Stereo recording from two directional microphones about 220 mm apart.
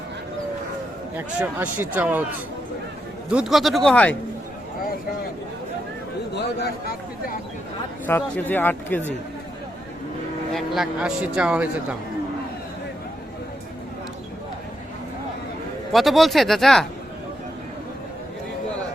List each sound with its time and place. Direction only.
1.1 s a man's voice: 10° right (ahead or behind)
3.2 s speech: 5° right (ahead or behind)
6.3 s a man's voice: 50° left (ahead or behind)
8.0 s speech: 10° left (ahead or behind)
10.5 s speech: centre (ahead or behind)
15.9 s speech: centre (ahead or behind)